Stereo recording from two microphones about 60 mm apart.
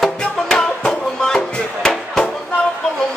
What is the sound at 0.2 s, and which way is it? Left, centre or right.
Music, centre.